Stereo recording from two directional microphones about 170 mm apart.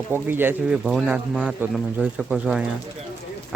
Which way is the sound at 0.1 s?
10° right (ahead or behind).